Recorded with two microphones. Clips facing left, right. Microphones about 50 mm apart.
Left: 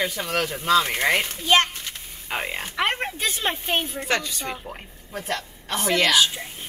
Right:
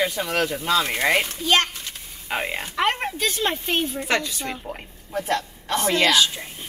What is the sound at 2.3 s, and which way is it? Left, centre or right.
Speech, centre.